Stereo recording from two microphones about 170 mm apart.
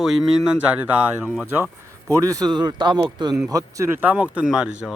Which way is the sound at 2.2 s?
20° right (ahead or behind).